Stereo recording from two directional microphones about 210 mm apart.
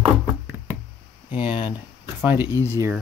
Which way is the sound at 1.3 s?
25° left (ahead or behind).